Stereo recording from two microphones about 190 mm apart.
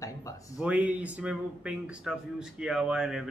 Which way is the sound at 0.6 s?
5° right (ahead or behind).